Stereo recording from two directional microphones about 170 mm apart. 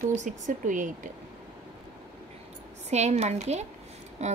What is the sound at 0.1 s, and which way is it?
Speech, 45° right (ahead or behind).